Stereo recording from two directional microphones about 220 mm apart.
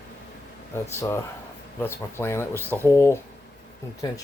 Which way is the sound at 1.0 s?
10° left (ahead or behind).